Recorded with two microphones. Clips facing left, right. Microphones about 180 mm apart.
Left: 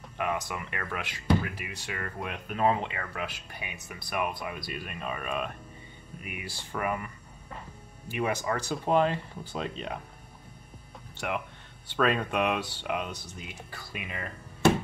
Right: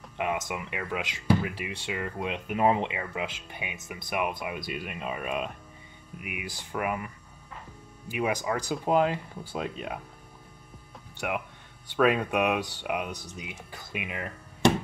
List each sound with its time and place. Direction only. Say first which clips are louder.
0.2 s speech: right 1 dB; 20° right (ahead or behind)
1.4 s speech: right 4 dB; 25° right (ahead or behind); by 7.1 s 10° right (ahead or behind)
8.1 s speech: right 1 dB; 10° right (ahead or behind)
11.1 s speech: right 1 dB; 10° right (ahead or behind)